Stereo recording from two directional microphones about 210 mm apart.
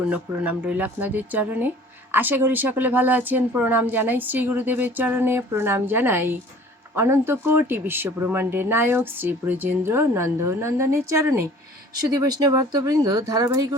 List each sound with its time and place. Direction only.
0.1 s speech: 5° right (ahead or behind)